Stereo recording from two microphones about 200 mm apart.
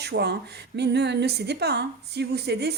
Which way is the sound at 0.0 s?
55° right (ahead or behind).